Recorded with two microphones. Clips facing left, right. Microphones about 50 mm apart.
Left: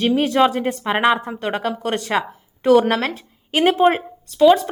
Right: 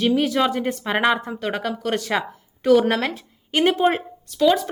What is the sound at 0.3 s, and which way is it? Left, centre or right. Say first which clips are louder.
Speech: left 4 dB; left.